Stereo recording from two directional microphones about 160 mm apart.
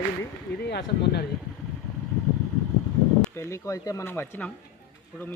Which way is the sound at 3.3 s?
20° left (ahead or behind).